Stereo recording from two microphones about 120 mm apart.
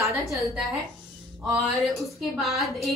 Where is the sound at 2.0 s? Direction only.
Centre (ahead or behind).